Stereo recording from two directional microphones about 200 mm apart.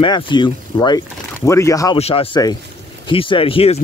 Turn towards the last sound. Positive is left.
turn(degrees=30)  # may be behind; listen again after turning